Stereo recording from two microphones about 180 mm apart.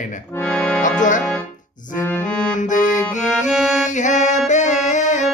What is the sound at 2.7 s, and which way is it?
Music, 45° left (ahead or behind).